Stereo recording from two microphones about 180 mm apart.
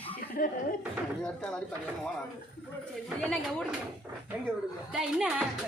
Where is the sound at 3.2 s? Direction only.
Centre (ahead or behind).